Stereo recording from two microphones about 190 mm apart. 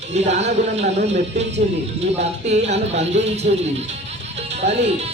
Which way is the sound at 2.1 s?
35° right (ahead or behind).